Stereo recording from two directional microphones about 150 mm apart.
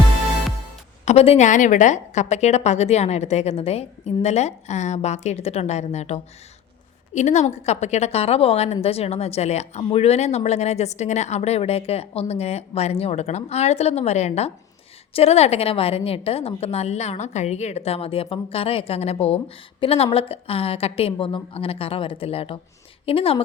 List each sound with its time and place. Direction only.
1.0 s a woman's voice: 40° left (ahead or behind)